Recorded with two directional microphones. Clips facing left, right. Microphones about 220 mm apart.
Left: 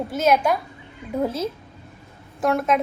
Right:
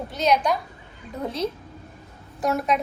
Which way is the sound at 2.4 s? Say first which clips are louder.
Left 3 dB; centre (ahead or behind).